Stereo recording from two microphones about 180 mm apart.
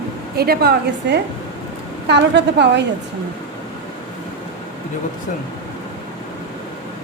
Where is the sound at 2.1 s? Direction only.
75° right (ahead or behind).